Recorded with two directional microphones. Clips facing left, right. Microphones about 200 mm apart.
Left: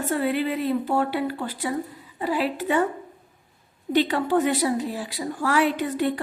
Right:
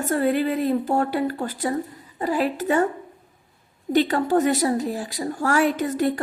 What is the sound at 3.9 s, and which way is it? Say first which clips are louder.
A woman's voice: right 2 dB; 45° right (ahead or behind).